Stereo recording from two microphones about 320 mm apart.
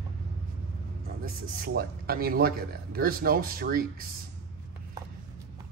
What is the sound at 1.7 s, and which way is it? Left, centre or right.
Speech, right.